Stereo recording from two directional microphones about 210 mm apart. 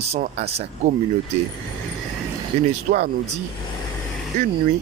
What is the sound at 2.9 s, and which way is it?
Speech, 35° right (ahead or behind).